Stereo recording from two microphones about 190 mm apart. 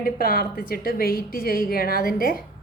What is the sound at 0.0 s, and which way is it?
A woman's voice, 50° left (ahead or behind).